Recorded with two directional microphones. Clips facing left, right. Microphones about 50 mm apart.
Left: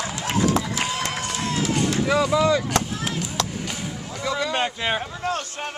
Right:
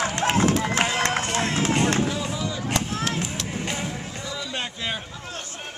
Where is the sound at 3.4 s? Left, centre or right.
Right.